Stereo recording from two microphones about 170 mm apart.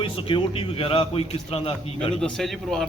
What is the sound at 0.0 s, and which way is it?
A man's voice, 30° left (ahead or behind).